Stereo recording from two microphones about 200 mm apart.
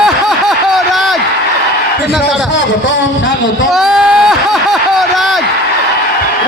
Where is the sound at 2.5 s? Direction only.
65° left (ahead or behind).